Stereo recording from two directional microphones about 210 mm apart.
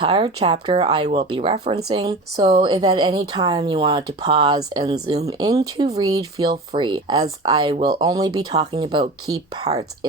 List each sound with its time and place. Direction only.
0.0 s a woman's voice: 25° right (ahead or behind)
2.0 s a woman's voice: 20° right (ahead or behind)